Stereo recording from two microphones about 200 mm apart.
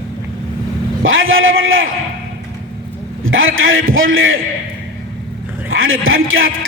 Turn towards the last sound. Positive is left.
turn(degrees=-90)